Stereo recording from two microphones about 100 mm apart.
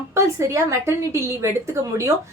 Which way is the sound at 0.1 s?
25° right (ahead or behind).